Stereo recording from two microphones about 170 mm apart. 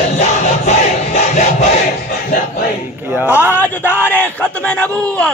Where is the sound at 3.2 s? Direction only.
10° right (ahead or behind).